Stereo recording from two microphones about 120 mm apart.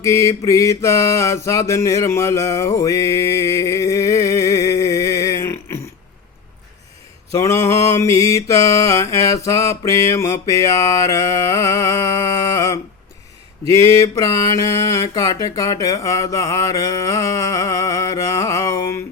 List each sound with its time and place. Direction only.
0.0 s mantra: 25° left (ahead or behind)
7.3 s speech: 25° left (ahead or behind)
14.0 s speech: 25° left (ahead or behind)